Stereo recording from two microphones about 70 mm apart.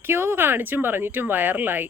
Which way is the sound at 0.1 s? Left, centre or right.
Right.